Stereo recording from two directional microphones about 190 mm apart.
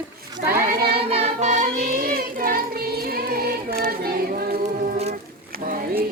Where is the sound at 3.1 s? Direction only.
55° right (ahead or behind).